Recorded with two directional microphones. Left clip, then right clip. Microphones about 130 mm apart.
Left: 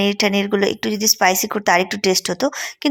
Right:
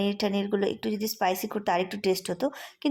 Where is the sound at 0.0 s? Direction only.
20° left (ahead or behind).